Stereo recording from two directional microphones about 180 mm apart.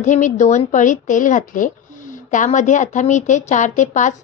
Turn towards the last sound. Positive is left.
turn(degrees=45)  # may be behind; listen again after turning